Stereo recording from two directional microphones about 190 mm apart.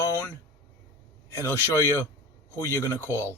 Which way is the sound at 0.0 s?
10° left (ahead or behind).